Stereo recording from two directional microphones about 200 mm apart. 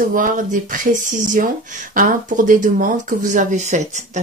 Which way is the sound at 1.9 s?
40° right (ahead or behind).